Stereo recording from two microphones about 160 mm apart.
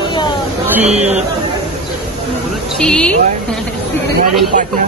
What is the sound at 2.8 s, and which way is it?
Speech, 5° left (ahead or behind).